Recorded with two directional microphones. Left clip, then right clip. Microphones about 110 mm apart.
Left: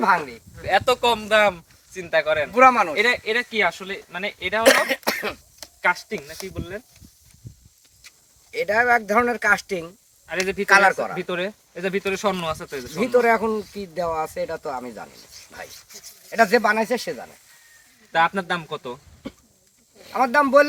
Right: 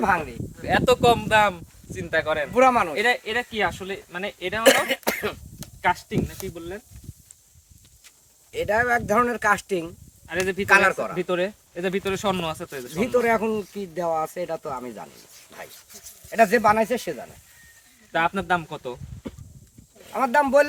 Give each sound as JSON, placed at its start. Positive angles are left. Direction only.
{"t": 0.0, "sound": "speech", "side_deg": -15}
{"t": 8.5, "sound": "speech", "side_deg": -20}
{"t": 15.9, "sound": "a sound", "side_deg": 0}
{"t": 16.3, "sound": "speech", "side_deg": -20}